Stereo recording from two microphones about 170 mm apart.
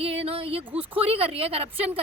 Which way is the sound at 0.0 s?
35° right (ahead or behind).